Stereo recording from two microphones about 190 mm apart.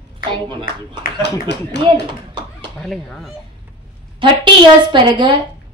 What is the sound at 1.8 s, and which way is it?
Tap, 25° right (ahead or behind).